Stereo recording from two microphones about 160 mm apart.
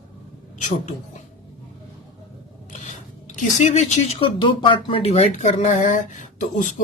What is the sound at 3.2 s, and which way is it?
Speech, 45° left (ahead or behind).